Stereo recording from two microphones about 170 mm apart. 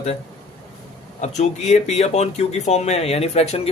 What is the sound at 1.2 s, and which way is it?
Speech, 40° left (ahead or behind).